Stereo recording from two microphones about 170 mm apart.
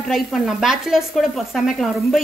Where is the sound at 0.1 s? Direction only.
Centre (ahead or behind).